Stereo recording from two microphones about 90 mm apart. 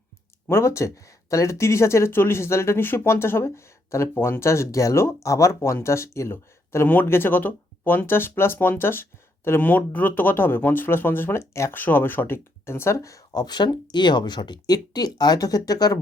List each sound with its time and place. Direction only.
0.4 s speech: 30° left (ahead or behind)
13.4 s speech: 55° left (ahead or behind)